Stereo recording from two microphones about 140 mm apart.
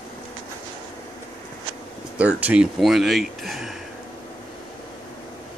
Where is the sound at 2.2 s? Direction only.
10° right (ahead or behind).